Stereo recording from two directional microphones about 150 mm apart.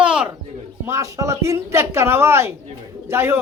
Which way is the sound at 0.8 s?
20° right (ahead or behind).